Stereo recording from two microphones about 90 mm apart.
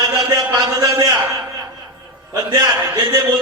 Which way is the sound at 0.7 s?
40° right (ahead or behind).